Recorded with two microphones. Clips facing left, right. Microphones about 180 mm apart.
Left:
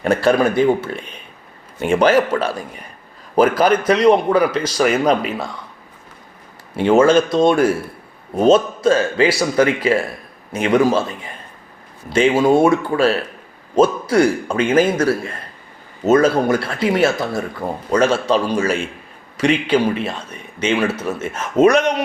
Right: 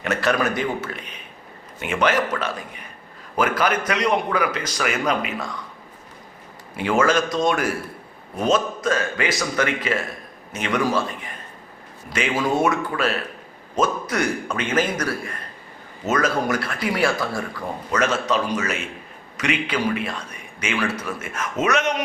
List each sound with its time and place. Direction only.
0.0 s a man's voice: 35° left (ahead or behind)
6.7 s a man's voice: 25° left (ahead or behind)